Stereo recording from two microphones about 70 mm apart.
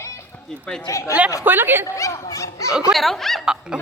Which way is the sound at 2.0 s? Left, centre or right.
Left.